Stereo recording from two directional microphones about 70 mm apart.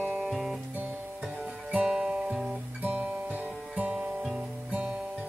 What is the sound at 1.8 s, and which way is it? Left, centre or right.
Music, centre.